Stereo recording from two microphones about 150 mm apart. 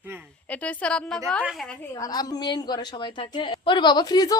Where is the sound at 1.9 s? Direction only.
25° left (ahead or behind).